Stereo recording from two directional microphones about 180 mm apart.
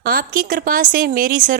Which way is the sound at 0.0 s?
55° right (ahead or behind).